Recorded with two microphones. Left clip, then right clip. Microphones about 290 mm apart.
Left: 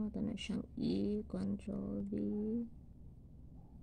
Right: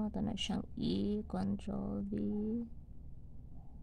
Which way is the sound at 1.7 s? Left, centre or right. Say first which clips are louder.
Right 2 dB; right.